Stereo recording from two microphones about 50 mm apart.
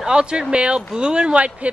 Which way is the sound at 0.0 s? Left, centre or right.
Centre.